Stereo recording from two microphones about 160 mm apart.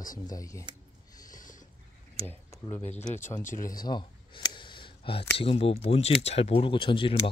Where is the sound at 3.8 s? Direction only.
25° left (ahead or behind).